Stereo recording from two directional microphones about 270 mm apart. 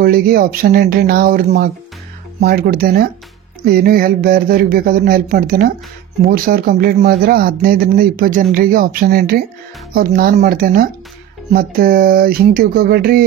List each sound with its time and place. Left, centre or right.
0.0 s speech: right